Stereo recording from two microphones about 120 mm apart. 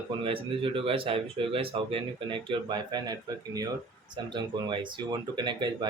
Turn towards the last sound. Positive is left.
turn(degrees=-40)  # may be behind; listen again after turning